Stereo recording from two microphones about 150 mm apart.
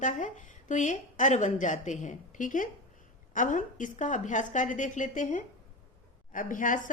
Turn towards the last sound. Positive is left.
turn(degrees=60)  # may be behind; listen again after turning